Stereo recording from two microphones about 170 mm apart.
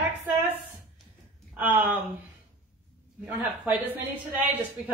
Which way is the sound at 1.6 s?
10° right (ahead or behind).